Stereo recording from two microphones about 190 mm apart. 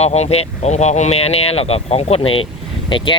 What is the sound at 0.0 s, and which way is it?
Speech, 35° left (ahead or behind).